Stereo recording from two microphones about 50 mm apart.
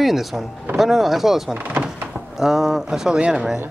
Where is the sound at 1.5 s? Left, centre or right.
Right.